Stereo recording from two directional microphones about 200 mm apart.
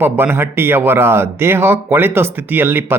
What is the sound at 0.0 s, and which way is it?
A man's voice, 10° right (ahead or behind).